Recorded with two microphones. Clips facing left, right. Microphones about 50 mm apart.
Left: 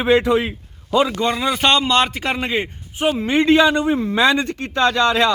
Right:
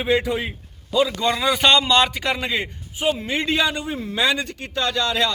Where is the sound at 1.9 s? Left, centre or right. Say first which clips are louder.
Left 1 dB; left.